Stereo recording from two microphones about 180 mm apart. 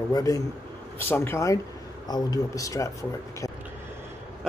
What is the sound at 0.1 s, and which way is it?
A man's voice, 20° left (ahead or behind).